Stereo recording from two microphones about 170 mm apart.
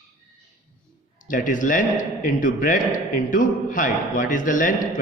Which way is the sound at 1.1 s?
50° left (ahead or behind).